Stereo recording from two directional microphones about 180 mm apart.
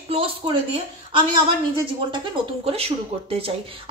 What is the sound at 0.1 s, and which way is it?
Speech, 30° right (ahead or behind).